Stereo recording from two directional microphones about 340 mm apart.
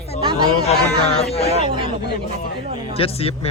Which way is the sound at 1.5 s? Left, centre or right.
Centre.